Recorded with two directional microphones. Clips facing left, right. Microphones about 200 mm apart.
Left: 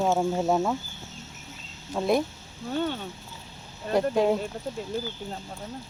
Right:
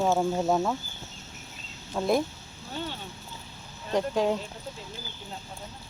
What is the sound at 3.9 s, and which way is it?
Speech, 10° left (ahead or behind).